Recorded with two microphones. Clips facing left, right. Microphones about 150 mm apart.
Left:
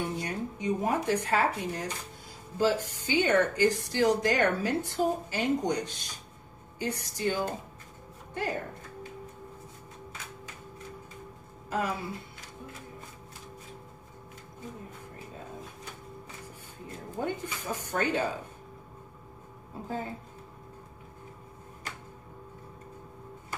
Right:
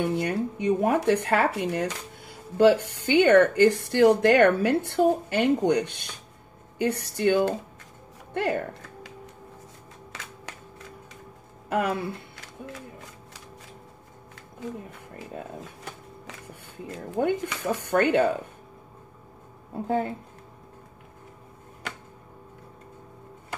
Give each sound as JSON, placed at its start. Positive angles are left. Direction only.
{"t": 0.0, "sound": "speech", "side_deg": -60}
{"t": 10.1, "sound": "typewriter", "side_deg": -85}
{"t": 11.7, "sound": "speech", "side_deg": -60}
{"t": 14.6, "sound": "a sound", "side_deg": -80}
{"t": 16.9, "sound": "speech", "side_deg": -70}
{"t": 19.7, "sound": "speech", "side_deg": -65}